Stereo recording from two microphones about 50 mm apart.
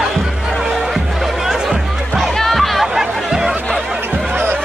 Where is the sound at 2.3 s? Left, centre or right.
Centre.